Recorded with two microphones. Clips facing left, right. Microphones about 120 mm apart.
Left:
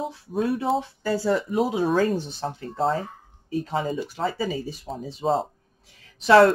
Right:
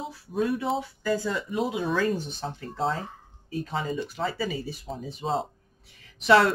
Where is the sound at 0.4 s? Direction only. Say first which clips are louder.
Left 3 dB; 35° left (ahead or behind).